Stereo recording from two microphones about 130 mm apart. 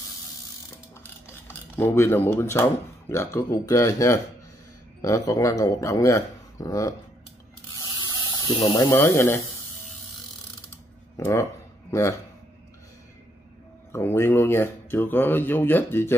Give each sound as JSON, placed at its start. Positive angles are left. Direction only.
{"t": 1.8, "sound": "speech", "side_deg": 20}
{"t": 7.8, "sound": "spray", "side_deg": 25}
{"t": 8.9, "sound": "speech", "side_deg": 20}
{"t": 11.1, "sound": "speech", "side_deg": 20}
{"t": 13.9, "sound": "speech", "side_deg": 20}